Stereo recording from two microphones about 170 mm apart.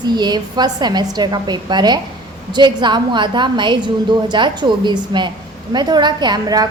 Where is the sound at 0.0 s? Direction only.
25° right (ahead or behind).